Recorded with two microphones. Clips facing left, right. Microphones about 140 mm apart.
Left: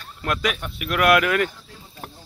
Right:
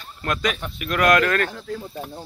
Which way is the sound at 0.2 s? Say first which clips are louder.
Even; 5° left (ahead or behind).